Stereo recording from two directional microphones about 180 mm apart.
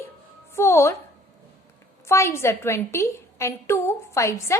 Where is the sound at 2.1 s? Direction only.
15° left (ahead or behind).